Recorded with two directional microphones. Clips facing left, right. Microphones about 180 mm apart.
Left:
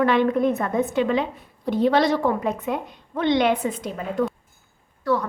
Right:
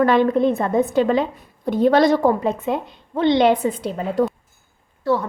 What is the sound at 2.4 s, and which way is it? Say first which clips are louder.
A woman's voice: right 3 dB; 30° right (ahead or behind).